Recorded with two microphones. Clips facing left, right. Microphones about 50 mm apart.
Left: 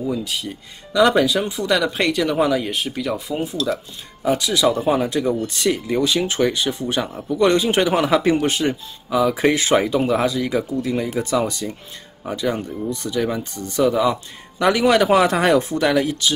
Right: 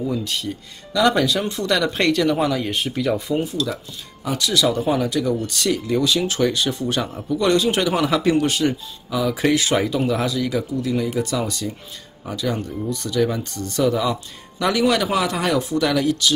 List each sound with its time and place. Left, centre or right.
0.0 s speech: centre
4.2 s speech: left